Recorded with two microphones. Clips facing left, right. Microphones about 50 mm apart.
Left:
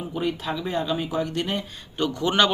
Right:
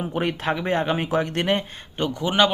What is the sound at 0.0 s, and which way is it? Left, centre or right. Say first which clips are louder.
Speech: right 3 dB; right.